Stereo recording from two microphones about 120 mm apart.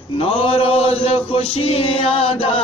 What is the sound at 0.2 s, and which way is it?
Chant, 50° left (ahead or behind).